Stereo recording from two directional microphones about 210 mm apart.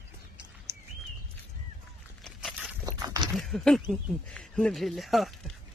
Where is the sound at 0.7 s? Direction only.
10° right (ahead or behind).